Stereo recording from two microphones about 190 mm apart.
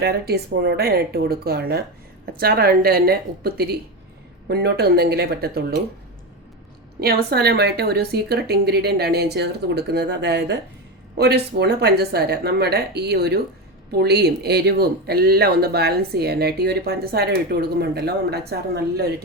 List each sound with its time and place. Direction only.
0.0 s a woman's voice: 55° right (ahead or behind)
7.0 s speech: 55° right (ahead or behind)